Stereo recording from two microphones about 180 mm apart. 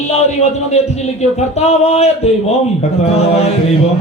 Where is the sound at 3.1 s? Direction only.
35° left (ahead or behind).